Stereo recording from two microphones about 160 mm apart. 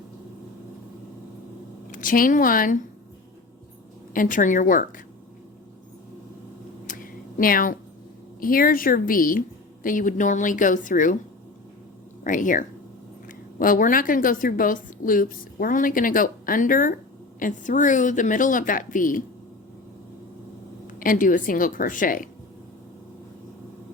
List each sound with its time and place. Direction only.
1.9 s a woman's voice: 55° left (ahead or behind)
4.1 s a woman's voice: 55° left (ahead or behind)
6.8 s a sound: 60° left (ahead or behind)
8.4 s a woman's voice: 65° left (ahead or behind)
12.2 s a woman's voice: 55° left (ahead or behind)
20.8 s a woman's voice: 60° left (ahead or behind)